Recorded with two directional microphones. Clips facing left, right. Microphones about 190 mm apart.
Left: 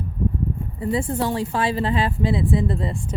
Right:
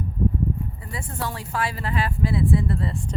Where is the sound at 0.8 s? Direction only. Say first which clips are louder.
Left 10 dB; 25° left (ahead or behind).